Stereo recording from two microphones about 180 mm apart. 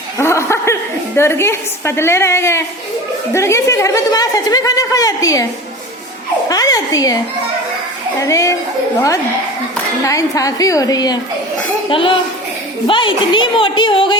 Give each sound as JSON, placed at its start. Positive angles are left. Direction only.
{"t": 0.2, "sound": "a woman's voice", "side_deg": 15}
{"t": 6.5, "sound": "a woman's voice", "side_deg": 20}
{"t": 8.2, "sound": "a woman's voice", "side_deg": 15}
{"t": 10.0, "sound": "a woman's voice", "side_deg": 20}